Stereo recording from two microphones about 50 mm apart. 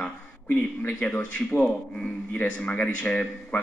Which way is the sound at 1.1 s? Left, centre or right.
Left.